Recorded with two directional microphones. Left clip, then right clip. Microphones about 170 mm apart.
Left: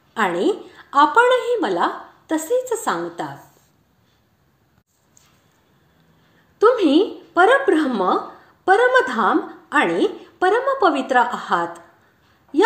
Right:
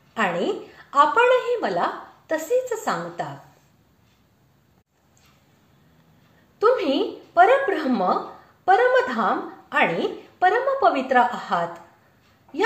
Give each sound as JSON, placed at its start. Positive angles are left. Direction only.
{"t": 0.1, "sound": "a woman's voice", "side_deg": 35}
{"t": 6.6, "sound": "a woman's voice", "side_deg": 30}